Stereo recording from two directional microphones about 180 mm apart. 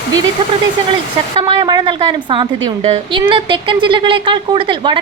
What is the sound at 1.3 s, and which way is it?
A woman's voice, 25° right (ahead or behind).